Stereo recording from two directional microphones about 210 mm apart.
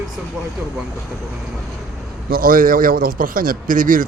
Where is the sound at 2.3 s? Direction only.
45° right (ahead or behind).